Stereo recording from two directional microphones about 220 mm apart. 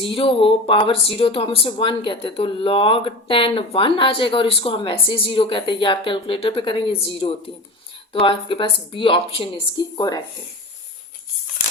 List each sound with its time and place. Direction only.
0.0 s speech: 25° left (ahead or behind)